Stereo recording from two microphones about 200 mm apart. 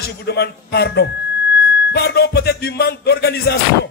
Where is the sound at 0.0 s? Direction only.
55° left (ahead or behind).